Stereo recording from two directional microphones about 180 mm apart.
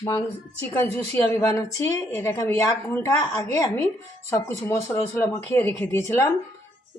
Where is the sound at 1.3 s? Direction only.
15° left (ahead or behind).